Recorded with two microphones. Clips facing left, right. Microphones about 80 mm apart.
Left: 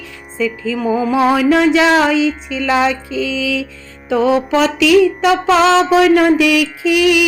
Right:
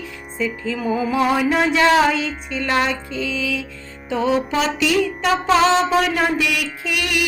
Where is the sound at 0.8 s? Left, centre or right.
Left.